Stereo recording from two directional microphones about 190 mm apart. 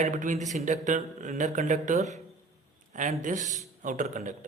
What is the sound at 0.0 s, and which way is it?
Speech, 40° right (ahead or behind).